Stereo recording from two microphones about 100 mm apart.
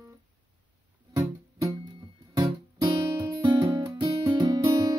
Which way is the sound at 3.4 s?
45° right (ahead or behind).